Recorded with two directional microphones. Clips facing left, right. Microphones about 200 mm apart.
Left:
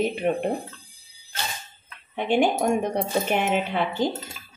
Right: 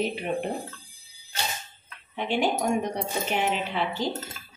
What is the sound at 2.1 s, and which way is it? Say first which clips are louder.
Speech: left 4 dB; 50° left (ahead or behind).